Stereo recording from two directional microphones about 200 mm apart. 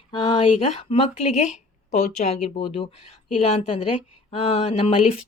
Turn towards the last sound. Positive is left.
turn(degrees=30)  # may be behind; listen again after turning